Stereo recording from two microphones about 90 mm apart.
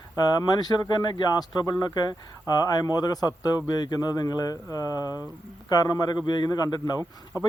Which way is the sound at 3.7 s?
50° left (ahead or behind).